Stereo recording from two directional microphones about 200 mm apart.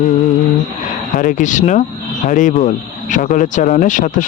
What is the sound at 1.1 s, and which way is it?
Speech, 45° left (ahead or behind).